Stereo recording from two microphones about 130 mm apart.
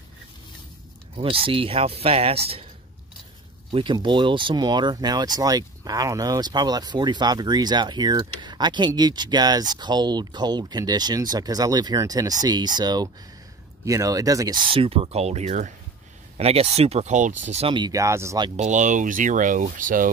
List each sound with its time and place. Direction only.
1.1 s speech: 45° right (ahead or behind)
3.7 s speech: 40° right (ahead or behind)
14.7 s speech: 45° right (ahead or behind); by 15.7 s 60° right (ahead or behind)
16.3 s speech: 50° right (ahead or behind)
17.7 s speech: 30° right (ahead or behind)
18.6 s speech: 70° right (ahead or behind); by 20.1 s 90° right